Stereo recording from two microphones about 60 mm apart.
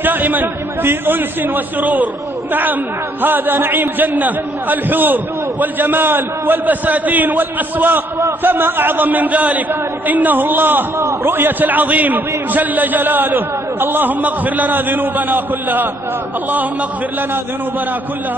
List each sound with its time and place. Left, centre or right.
0.0 s a man's voice: right
11.0 s a man's voice: right
11.3 s a man's voice: right